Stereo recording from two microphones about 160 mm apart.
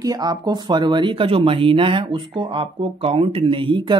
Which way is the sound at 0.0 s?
25° right (ahead or behind).